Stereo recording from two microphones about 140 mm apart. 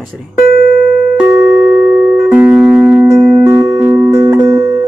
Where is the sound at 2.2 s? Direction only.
10° right (ahead or behind).